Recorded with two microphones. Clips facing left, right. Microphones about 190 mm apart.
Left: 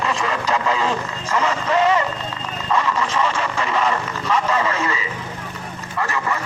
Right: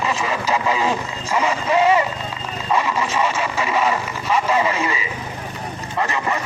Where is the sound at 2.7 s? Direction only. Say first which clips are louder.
Even; 10° right (ahead or behind).